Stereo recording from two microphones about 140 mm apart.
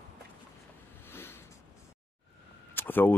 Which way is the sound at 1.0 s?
15° left (ahead or behind).